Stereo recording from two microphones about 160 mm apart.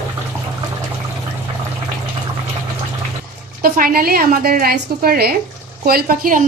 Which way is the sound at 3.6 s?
65° right (ahead or behind).